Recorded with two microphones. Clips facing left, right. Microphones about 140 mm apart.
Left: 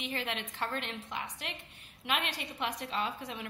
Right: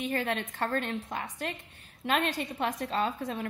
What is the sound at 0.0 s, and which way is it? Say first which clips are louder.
A woman's voice: right 6 dB; 45° right (ahead or behind).